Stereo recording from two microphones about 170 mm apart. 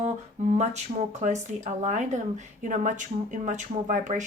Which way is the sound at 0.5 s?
40° right (ahead or behind).